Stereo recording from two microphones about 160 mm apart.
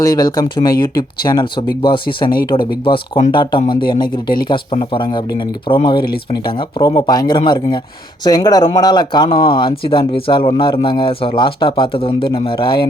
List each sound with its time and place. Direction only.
0.0 s speech: 25° left (ahead or behind)
3.3 s a man's voice: 30° left (ahead or behind)